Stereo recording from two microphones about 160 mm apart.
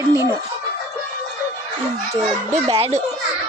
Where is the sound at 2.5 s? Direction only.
40° right (ahead or behind).